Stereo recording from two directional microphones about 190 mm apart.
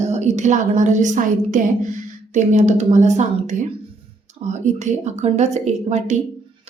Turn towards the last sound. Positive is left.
turn(degrees=-40)  # may be behind; listen again after turning